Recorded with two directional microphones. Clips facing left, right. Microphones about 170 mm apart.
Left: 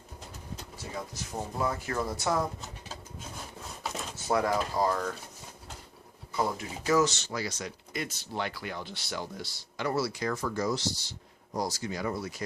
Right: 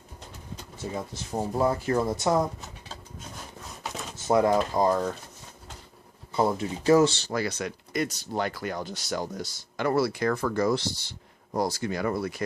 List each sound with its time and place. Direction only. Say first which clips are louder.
0.9 s speech: right 5 dB; 25° right (ahead or behind)
4.3 s speech: right 6 dB; 25° right (ahead or behind)
6.3 s speech: right 6 dB; 30° right (ahead or behind)
7.3 s speech: right 6 dB; 55° right (ahead or behind)
8.0 s speech: right 4 dB; 40° right (ahead or behind); by 12.5 s 60° right (ahead or behind)